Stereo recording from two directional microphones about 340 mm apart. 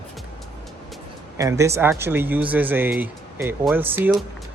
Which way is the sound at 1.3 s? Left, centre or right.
Centre.